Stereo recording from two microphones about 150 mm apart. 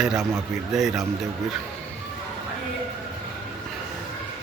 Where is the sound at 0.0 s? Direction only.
5° right (ahead or behind).